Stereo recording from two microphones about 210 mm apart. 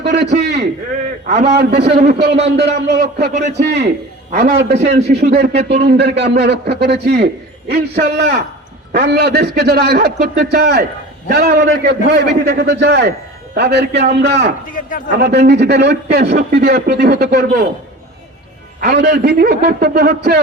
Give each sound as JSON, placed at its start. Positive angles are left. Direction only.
{"t": 0.0, "sound": "a sound", "side_deg": -50}
{"t": 1.3, "sound": "a man's voice", "side_deg": -50}
{"t": 1.7, "sound": "a man's voice", "side_deg": -35}
{"t": 2.1, "sound": "a man's voice", "side_deg": -50}
{"t": 3.3, "sound": "a man's voice", "side_deg": -35}
{"t": 4.3, "sound": "a man's voice", "side_deg": -45}
{"t": 5.6, "sound": "speech", "side_deg": -25}
{"t": 5.9, "sound": "a man's voice", "side_deg": -55}
{"t": 14.7, "sound": "a man's voice", "side_deg": 40}
{"t": 15.1, "sound": "a man's voice", "side_deg": -50}
{"t": 18.8, "sound": "a man's voice", "side_deg": -50}